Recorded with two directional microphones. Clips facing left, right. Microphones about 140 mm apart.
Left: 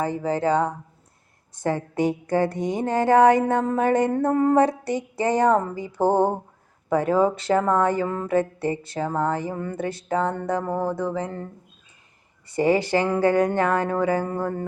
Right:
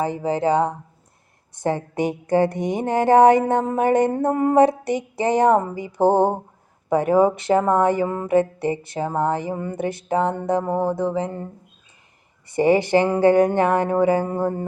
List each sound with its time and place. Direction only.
0.0 s speech: 20° right (ahead or behind)
12.5 s speech: 20° right (ahead or behind)